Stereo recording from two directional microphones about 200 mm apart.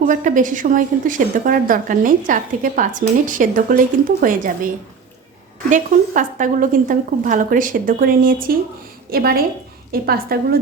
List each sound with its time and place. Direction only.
0.1 s a woman's voice: 40° right (ahead or behind)
5.7 s a woman's voice: 40° right (ahead or behind)